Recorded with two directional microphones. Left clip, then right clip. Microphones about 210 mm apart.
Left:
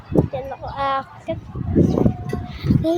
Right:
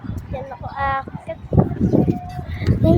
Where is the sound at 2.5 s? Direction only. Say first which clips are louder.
Right 2 dB; 10° left (ahead or behind).